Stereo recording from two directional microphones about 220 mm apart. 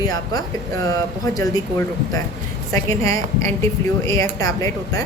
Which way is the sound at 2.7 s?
15° left (ahead or behind).